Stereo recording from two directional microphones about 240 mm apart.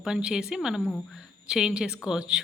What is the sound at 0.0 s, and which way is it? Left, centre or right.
A woman's voice, centre.